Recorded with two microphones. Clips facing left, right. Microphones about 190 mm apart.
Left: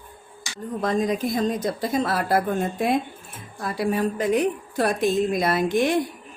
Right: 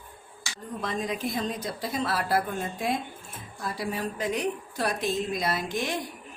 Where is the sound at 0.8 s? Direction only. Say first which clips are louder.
Left 8 dB; 45° left (ahead or behind).